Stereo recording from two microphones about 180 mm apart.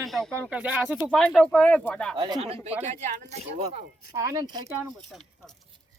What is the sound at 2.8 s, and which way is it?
Speech, 40° right (ahead or behind).